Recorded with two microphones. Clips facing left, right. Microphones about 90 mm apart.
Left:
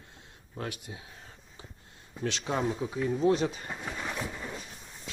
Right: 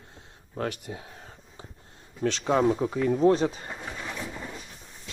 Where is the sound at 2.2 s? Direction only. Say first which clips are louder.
Right 6 dB; 40° right (ahead or behind).